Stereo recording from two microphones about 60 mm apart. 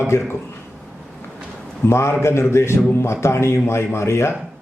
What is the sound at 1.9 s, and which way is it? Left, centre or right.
A man's voice, left.